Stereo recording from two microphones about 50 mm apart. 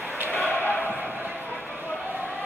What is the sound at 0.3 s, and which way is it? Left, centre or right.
Basketball bounce, left.